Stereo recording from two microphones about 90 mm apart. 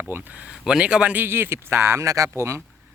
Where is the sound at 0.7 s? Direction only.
10° right (ahead or behind); by 2.6 s 30° right (ahead or behind).